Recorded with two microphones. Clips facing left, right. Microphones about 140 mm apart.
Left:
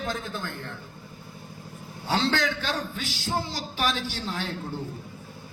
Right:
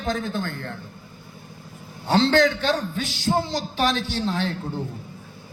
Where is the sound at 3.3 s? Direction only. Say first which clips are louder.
Right 7 dB; 40° right (ahead or behind).